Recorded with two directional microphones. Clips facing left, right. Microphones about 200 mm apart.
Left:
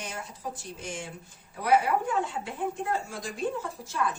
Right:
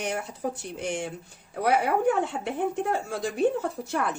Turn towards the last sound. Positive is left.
turn(degrees=-65)  # may be behind; listen again after turning